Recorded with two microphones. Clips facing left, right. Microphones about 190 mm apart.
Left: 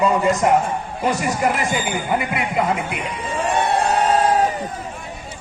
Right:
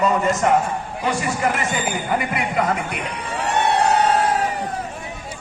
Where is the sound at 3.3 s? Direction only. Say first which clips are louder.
Left 1 dB; 65° right (ahead or behind).